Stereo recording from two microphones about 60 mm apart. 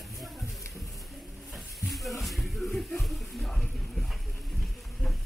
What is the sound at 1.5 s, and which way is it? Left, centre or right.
Speech, centre.